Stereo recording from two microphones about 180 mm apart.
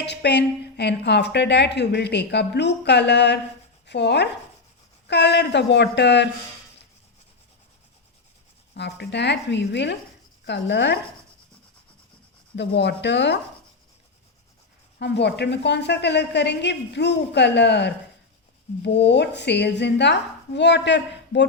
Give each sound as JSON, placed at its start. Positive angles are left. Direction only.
{"t": 0.0, "sound": "a woman's voice", "side_deg": 70}
{"t": 3.8, "sound": "chopping", "side_deg": 70}
{"t": 5.0, "sound": "a woman's voice", "side_deg": 70}
{"t": 8.7, "sound": "a woman's voice", "side_deg": 70}
{"t": 12.5, "sound": "a woman's voice", "side_deg": 75}
{"t": 14.9, "sound": "a woman's voice", "side_deg": 70}